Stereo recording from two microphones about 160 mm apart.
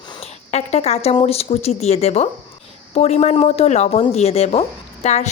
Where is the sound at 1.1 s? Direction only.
40° left (ahead or behind).